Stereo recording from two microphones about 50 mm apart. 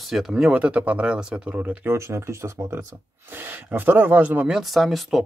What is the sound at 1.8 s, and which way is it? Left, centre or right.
Speech, right.